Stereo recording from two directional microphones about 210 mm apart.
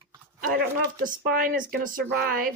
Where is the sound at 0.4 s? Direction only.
45° right (ahead or behind).